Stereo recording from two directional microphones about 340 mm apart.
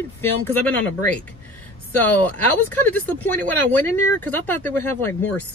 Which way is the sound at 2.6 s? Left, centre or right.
Centre.